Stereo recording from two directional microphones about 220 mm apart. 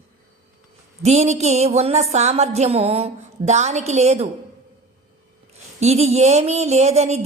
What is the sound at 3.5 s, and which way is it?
Speech, 30° right (ahead or behind).